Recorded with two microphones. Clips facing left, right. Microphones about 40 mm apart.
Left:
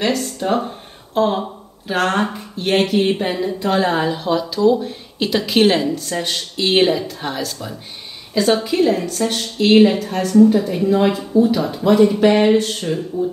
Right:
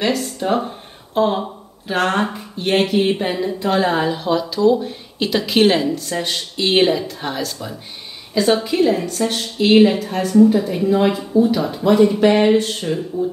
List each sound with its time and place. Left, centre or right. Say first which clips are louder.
0.0 s speech: even; centre